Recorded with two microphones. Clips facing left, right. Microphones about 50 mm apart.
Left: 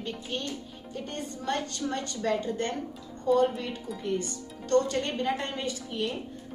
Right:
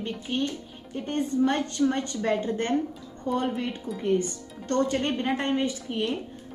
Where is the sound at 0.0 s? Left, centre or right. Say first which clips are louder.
Right 5 dB; right.